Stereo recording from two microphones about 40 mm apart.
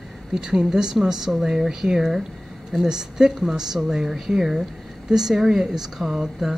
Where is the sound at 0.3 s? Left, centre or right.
Centre.